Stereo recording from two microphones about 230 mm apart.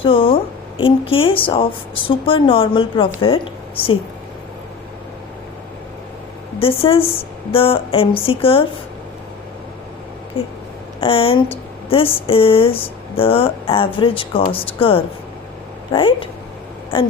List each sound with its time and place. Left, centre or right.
0.0 s a woman's voice: left
6.6 s speech: left
10.4 s speech: left